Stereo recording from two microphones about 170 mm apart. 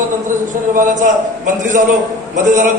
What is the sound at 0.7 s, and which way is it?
A man's voice, 50° right (ahead or behind).